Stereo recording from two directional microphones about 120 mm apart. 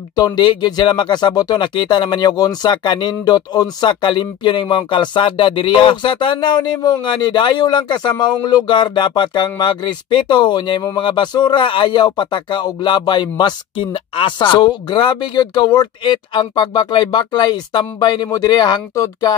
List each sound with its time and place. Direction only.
0.1 s speech: 35° left (ahead or behind)